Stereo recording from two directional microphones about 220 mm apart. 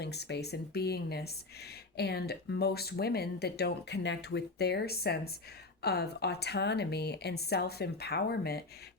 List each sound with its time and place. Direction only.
0.0 s speech: 50° left (ahead or behind)